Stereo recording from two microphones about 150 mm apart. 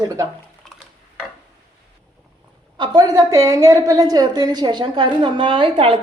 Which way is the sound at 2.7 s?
30° right (ahead or behind).